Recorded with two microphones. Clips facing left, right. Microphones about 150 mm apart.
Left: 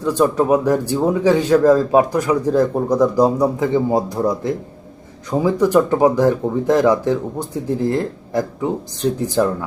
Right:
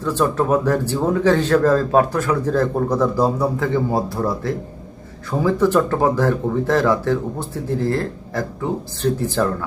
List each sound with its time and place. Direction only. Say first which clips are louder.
0.0 s speech: left 3 dB; 15° left (ahead or behind)